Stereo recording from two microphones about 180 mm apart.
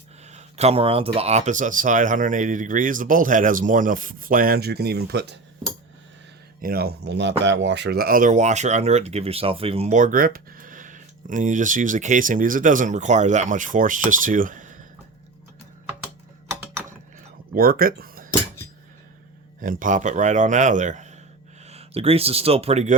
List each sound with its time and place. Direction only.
0.3 s speech: 35° right (ahead or behind); by 5.4 s 65° right (ahead or behind)
6.6 s speech: 55° right (ahead or behind)
17.5 s speech: 55° right (ahead or behind)
19.6 s speech: 50° right (ahead or behind)